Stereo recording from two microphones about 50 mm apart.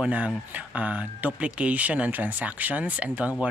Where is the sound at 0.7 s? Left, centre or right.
Right.